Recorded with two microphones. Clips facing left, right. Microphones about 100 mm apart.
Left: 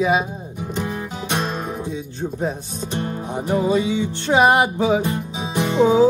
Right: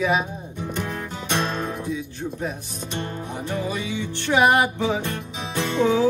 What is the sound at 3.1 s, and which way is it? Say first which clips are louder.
Music: left 6 dB; 25° left (ahead or behind).